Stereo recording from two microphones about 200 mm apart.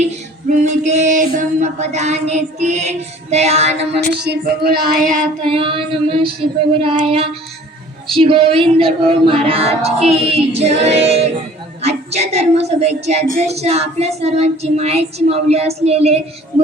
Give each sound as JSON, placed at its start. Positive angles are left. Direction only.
{"t": 0.5, "sound": "child singing", "side_deg": -40}
{"t": 4.1, "sound": "child singing", "side_deg": -55}
{"t": 5.5, "sound": "a woman's voice", "side_deg": -25}
{"t": 13.5, "sound": "child singing", "side_deg": -30}